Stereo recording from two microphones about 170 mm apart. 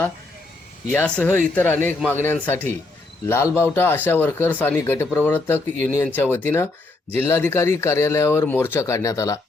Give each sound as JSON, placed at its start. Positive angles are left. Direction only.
{"t": 0.9, "sound": "speech", "side_deg": 10}